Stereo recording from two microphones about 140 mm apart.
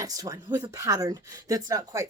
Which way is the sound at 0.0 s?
25° right (ahead or behind).